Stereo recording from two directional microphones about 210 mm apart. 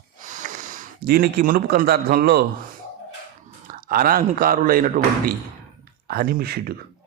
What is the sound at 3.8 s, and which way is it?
A man's voice, 45° right (ahead or behind).